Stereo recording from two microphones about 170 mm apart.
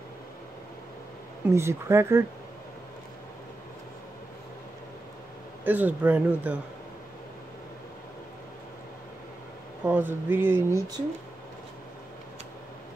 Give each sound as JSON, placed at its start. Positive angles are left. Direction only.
{"t": 1.5, "sound": "speech", "side_deg": -15}
{"t": 5.6, "sound": "speech", "side_deg": -10}
{"t": 9.8, "sound": "speech", "side_deg": -10}